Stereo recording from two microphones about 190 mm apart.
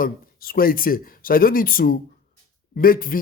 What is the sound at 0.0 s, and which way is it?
A man's voice, 50° left (ahead or behind).